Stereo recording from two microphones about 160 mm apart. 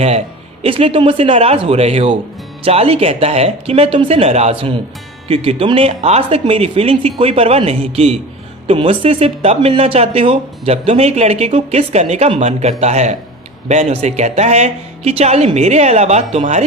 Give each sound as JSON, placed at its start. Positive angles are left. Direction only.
{"t": 0.6, "sound": "speech", "side_deg": -35}